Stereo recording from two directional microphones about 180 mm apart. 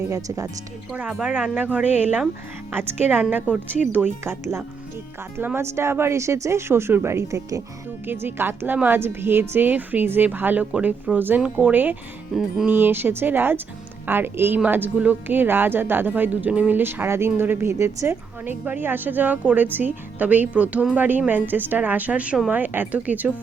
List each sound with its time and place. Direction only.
0.1 s speech: 20° right (ahead or behind)
0.9 s speech: 5° right (ahead or behind)